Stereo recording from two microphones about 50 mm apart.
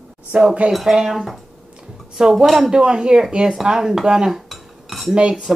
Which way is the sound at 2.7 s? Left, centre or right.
Centre.